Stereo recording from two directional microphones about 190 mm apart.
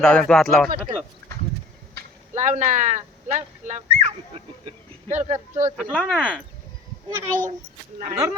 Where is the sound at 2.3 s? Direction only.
40° right (ahead or behind).